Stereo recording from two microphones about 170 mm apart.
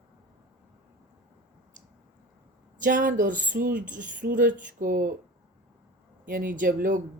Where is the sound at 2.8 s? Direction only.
50° right (ahead or behind).